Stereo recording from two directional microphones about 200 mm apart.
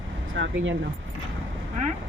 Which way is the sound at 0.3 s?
70° right (ahead or behind).